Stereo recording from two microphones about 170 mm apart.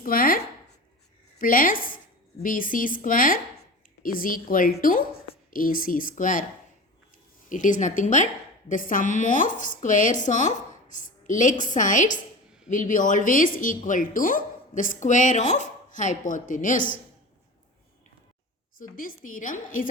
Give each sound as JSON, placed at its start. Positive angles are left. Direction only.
{"t": 0.0, "sound": "chopping", "side_deg": 55}
{"t": 1.4, "sound": "a woman's voice", "side_deg": 55}
{"t": 7.5, "sound": "a woman's voice", "side_deg": 50}
{"t": 18.8, "sound": "a woman's voice", "side_deg": 55}